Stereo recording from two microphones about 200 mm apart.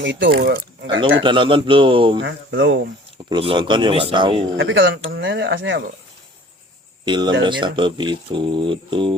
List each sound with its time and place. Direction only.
0.0 s speech: 60° right (ahead or behind)
1.2 s speech: 25° right (ahead or behind)
2.2 s speech: 65° right (ahead or behind)
3.2 s speech: 25° right (ahead or behind)
4.5 s speech: 70° right (ahead or behind)
7.0 s speech: 25° right (ahead or behind)